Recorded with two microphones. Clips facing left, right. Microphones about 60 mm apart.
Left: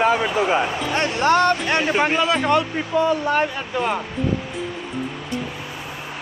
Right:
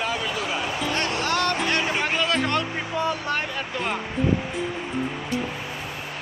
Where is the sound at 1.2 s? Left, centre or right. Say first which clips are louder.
Left 10 dB; left; by 3.9 s centre.